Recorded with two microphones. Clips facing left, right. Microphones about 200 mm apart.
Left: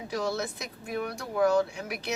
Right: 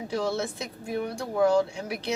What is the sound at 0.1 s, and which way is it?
Speech, 30° right (ahead or behind).